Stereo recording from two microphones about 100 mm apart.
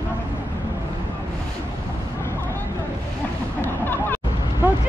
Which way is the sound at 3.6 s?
20° left (ahead or behind).